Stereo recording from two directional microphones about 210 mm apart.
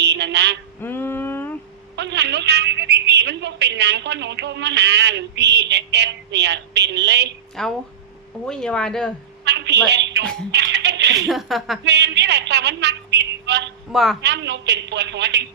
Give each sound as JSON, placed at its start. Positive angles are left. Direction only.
{"t": 0.0, "sound": "a sound", "side_deg": -55}
{"t": 0.8, "sound": "a sound", "side_deg": 10}
{"t": 2.0, "sound": "a woman's voice", "side_deg": -55}
{"t": 7.6, "sound": "speech", "side_deg": 0}
{"t": 9.4, "sound": "a woman's voice", "side_deg": -55}
{"t": 10.5, "sound": "a sound", "side_deg": -55}
{"t": 11.3, "sound": "speech", "side_deg": 0}
{"t": 11.9, "sound": "a woman's voice", "side_deg": -55}
{"t": 13.9, "sound": "speech", "side_deg": 0}
{"t": 14.2, "sound": "a woman's voice", "side_deg": -55}